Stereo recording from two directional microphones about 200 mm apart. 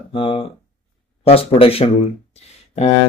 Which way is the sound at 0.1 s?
25° left (ahead or behind).